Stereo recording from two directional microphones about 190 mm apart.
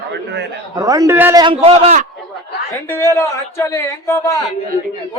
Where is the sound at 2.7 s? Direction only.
15° left (ahead or behind).